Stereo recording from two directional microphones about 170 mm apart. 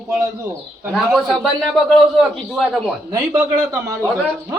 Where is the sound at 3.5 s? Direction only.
20° right (ahead or behind).